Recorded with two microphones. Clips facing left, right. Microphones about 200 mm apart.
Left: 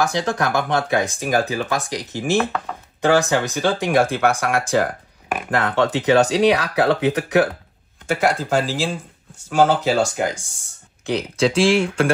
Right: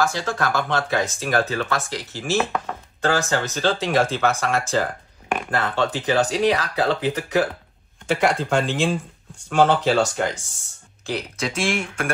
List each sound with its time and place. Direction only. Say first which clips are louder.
0.0 s speech: left 2 dB; 20° left (ahead or behind)
5.9 s speech: left 5 dB; 70° left (ahead or behind)
8.1 s speech: left 1 dB; 5° left (ahead or behind)
11.1 s speech: left 5 dB; 20° left (ahead or behind)
11.4 s speech: left 9 dB; 30° left (ahead or behind)